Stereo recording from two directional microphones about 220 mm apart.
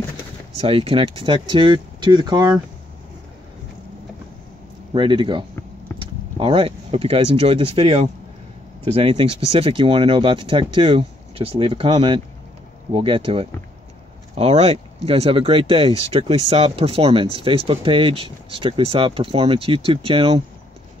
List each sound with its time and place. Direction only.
0.6 s speech: 25° right (ahead or behind)
4.9 s speech: 20° right (ahead or behind)